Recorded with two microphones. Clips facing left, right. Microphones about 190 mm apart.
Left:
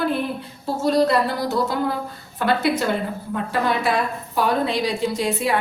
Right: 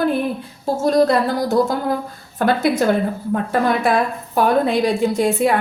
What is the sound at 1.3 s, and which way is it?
A woman's voice, 45° right (ahead or behind).